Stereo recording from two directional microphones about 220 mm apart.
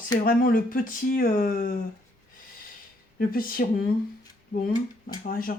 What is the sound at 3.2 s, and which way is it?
Speech, 40° left (ahead or behind).